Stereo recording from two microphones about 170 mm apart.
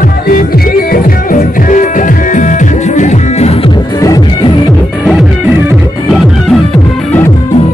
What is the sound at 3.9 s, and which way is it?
Music, 20° left (ahead or behind).